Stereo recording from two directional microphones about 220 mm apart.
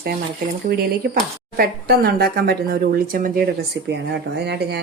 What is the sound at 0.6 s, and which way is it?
Speech, 45° right (ahead or behind).